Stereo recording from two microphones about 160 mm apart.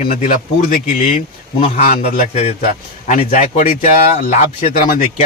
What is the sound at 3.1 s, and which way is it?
Speech, 55° left (ahead or behind).